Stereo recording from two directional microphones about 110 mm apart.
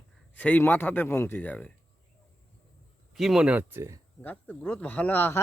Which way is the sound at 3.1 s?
5° right (ahead or behind).